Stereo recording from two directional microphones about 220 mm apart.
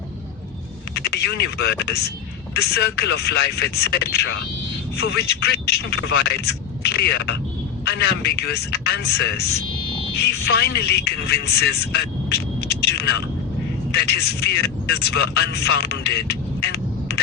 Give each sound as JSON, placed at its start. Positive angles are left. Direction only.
{"t": 0.9, "sound": "a man's voice", "side_deg": 50}